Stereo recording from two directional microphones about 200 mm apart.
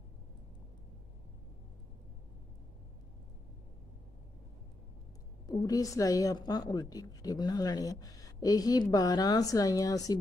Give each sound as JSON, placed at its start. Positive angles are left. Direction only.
{"t": 5.5, "sound": "a woman's voice", "side_deg": 15}